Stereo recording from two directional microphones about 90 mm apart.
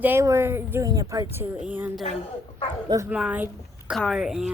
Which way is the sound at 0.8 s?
40° right (ahead or behind).